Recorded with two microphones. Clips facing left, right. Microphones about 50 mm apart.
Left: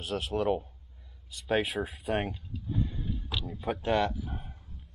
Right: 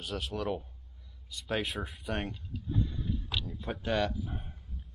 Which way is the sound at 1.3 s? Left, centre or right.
Centre.